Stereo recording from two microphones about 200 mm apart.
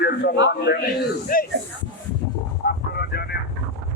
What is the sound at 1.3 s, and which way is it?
Speech, 45° left (ahead or behind).